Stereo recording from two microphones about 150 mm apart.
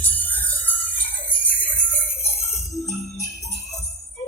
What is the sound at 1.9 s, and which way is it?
Jingle bell, 15° left (ahead or behind).